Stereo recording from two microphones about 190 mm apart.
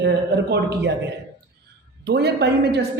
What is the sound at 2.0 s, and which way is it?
Speech, 60° right (ahead or behind).